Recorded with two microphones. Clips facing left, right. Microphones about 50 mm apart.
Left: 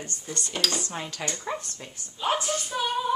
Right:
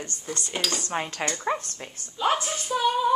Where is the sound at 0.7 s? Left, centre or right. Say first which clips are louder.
Right 3 dB; right.